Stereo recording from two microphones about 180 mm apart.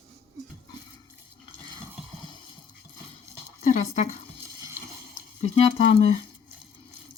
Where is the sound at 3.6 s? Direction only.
40° left (ahead or behind).